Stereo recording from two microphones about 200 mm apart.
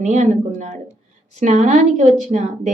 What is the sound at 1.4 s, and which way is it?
A woman's voice, 35° right (ahead or behind).